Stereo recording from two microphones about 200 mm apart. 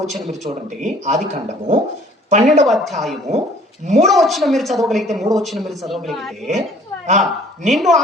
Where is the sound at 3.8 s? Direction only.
35° right (ahead or behind).